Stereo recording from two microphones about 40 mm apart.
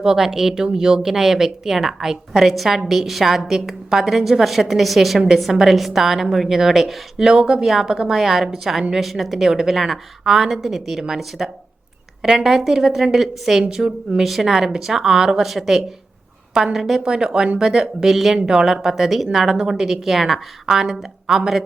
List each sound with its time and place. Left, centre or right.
0.0 s a woman's voice: centre
17.1 s speech: right
17.6 s speech: centre
18.4 s speech: centre